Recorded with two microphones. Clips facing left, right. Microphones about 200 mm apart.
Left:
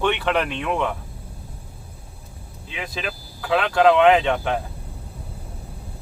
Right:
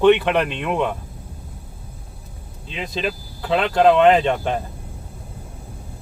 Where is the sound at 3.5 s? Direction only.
20° right (ahead or behind).